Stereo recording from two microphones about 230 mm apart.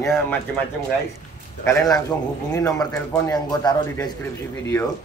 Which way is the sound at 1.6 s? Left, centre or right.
Centre.